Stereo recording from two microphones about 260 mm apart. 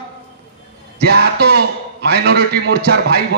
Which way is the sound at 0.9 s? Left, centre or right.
Right.